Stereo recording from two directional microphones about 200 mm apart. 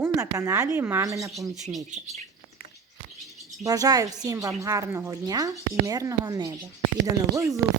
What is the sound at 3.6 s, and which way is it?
A woman's voice, 20° right (ahead or behind).